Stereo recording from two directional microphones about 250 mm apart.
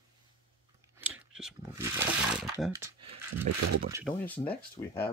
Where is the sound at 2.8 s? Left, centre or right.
Right.